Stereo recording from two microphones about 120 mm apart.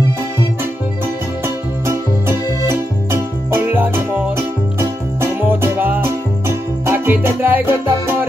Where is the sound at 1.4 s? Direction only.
20° right (ahead or behind).